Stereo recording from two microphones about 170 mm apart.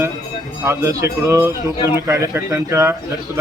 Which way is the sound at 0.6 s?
15° right (ahead or behind).